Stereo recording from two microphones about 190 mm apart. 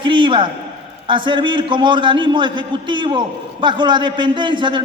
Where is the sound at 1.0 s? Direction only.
25° right (ahead or behind).